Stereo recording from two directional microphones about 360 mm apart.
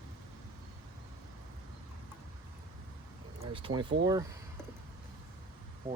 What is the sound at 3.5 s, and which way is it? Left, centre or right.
Speech, centre.